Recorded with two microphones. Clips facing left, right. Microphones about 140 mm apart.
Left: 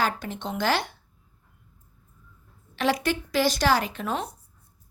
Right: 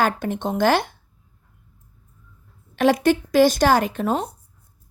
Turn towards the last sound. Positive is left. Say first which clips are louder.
# right 7 dB
turn(degrees=-35)  # may be behind; listen again after turning